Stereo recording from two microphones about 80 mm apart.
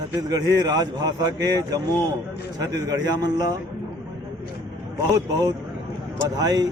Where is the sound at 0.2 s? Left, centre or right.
Right.